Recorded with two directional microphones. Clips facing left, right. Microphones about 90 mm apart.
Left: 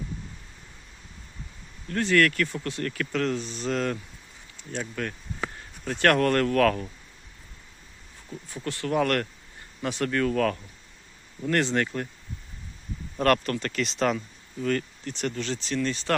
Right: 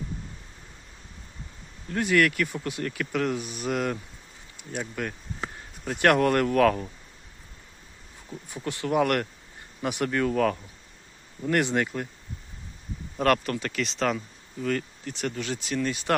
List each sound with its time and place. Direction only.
1.9 s speech: 15° right (ahead or behind)
8.3 s speech: 15° right (ahead or behind)
13.1 s speech: 5° right (ahead or behind)